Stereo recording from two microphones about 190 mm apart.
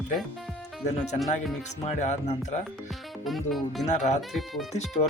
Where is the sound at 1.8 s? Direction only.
35° left (ahead or behind).